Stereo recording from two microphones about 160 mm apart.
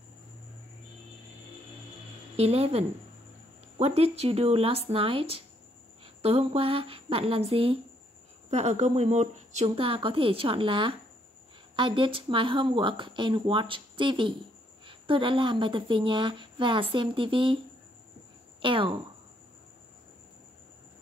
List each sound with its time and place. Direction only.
2.3 s speech: 40° right (ahead or behind)
18.6 s speech: 30° right (ahead or behind)